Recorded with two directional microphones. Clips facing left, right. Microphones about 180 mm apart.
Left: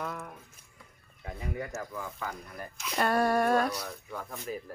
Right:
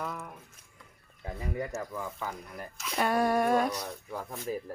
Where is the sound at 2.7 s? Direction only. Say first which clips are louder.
Even; centre (ahead or behind).